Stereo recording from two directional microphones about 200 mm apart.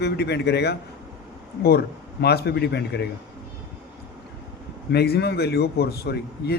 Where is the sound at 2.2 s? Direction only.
55° left (ahead or behind).